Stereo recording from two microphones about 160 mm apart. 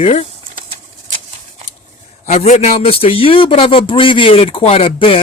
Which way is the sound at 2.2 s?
45° left (ahead or behind).